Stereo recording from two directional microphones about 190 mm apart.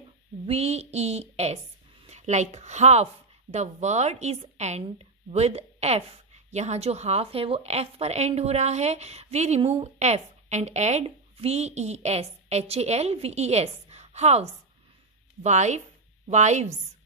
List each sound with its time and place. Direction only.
0.5 s a woman's voice: 35° right (ahead or behind)